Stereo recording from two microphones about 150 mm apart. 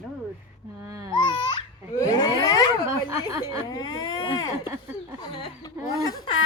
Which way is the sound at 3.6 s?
25° left (ahead or behind).